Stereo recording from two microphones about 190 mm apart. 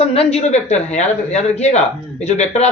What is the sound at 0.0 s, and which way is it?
Speech, 30° left (ahead or behind).